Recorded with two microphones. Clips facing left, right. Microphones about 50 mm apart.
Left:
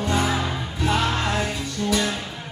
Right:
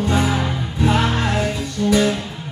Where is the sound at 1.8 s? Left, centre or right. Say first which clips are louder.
Right 6 dB; centre.